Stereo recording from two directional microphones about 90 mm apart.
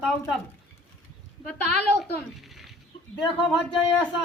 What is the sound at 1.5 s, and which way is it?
Speech, 15° left (ahead or behind).